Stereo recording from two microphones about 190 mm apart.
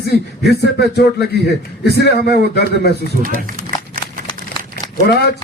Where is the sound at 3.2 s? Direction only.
45° right (ahead or behind).